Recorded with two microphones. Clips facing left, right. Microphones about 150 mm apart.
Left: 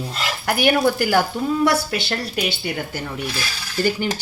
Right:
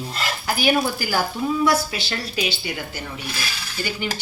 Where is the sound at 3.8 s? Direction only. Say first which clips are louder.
Left 7 dB; 45° left (ahead or behind).